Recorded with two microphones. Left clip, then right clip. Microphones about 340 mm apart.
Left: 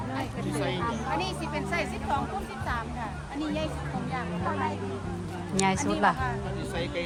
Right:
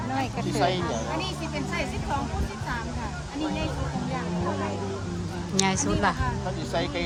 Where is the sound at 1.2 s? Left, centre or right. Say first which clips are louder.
Even; centre.